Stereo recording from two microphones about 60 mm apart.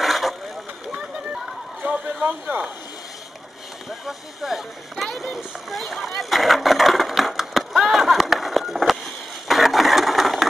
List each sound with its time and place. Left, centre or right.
0.0 s vehicle: centre
0.9 s a sound: centre
4.0 s speech: centre
5.0 s vehicle: centre